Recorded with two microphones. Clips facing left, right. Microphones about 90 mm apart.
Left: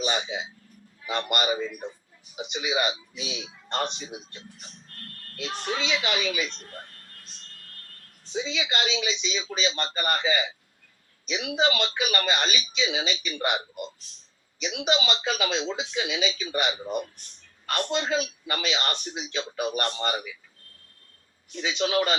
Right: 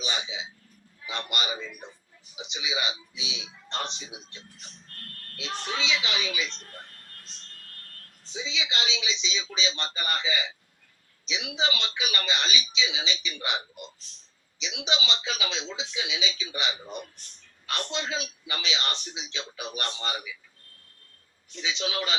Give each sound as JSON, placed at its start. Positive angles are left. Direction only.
{"t": 0.0, "sound": "a sound", "side_deg": 50}
{"t": 1.0, "sound": "a man's voice", "side_deg": 50}
{"t": 5.6, "sound": "a man's voice", "side_deg": 50}
{"t": 8.3, "sound": "a man's voice", "side_deg": 50}
{"t": 21.5, "sound": "a man's voice", "side_deg": 50}